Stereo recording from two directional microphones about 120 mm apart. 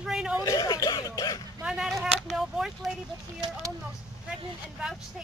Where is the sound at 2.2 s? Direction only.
Centre (ahead or behind).